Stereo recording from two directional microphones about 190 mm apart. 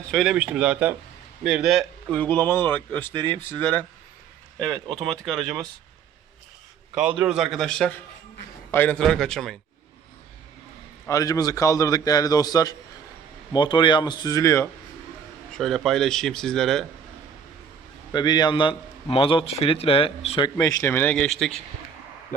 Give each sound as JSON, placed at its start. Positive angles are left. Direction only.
{"t": 0.1, "sound": "speech", "side_deg": 0}
{"t": 7.2, "sound": "speech", "side_deg": -5}
{"t": 11.1, "sound": "a man's voice", "side_deg": 20}
{"t": 15.5, "sound": "speech", "side_deg": 0}
{"t": 18.1, "sound": "a man's voice", "side_deg": 25}
{"t": 20.7, "sound": "speech", "side_deg": 10}